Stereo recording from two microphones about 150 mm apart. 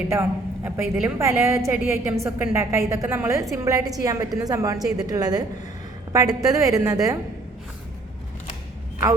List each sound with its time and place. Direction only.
0.1 s a woman's voice: 15° right (ahead or behind)